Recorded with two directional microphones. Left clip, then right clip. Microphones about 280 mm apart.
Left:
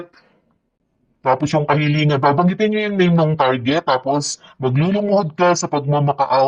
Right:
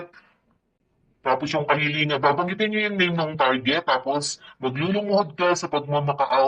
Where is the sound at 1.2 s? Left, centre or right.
Left.